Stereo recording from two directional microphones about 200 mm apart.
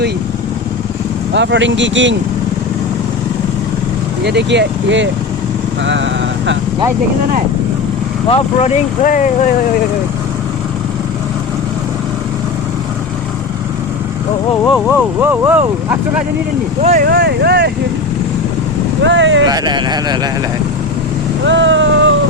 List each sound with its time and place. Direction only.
1.3 s speech: 60° right (ahead or behind)
4.2 s speech: 60° right (ahead or behind)
8.3 s speech: 35° left (ahead or behind)
14.9 s speech: 10° right (ahead or behind)
16.8 s speech: 35° right (ahead or behind)
17.1 s speech: 55° right (ahead or behind)
19.0 s speech: 65° right (ahead or behind)
19.5 s speech: 20° right (ahead or behind)
21.4 s vehicle: 65° right (ahead or behind)